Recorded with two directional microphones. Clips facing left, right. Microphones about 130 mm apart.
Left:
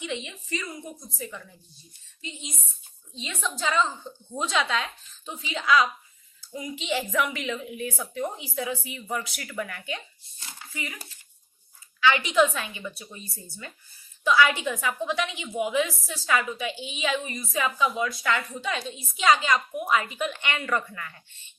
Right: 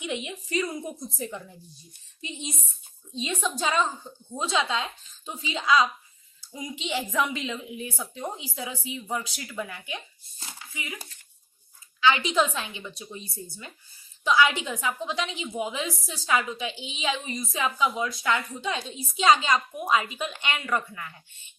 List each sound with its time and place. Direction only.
0.0 s a woman's voice: 15° right (ahead or behind)
4.4 s a woman's voice: 30° right (ahead or behind)
5.2 s a woman's voice: 15° right (ahead or behind)
11.9 s a woman's voice: 25° right (ahead or behind)